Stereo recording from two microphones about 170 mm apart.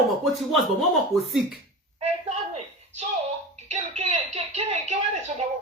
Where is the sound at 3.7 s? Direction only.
40° right (ahead or behind).